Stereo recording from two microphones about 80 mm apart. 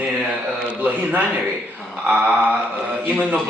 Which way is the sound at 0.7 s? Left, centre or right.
Centre.